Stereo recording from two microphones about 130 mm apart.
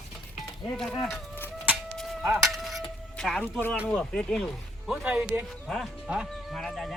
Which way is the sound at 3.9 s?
5° left (ahead or behind).